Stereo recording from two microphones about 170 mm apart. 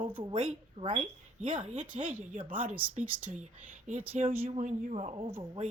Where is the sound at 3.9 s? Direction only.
50° right (ahead or behind).